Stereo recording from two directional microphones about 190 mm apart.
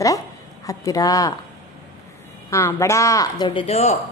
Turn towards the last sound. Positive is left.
turn(degrees=35)  # may be behind; listen again after turning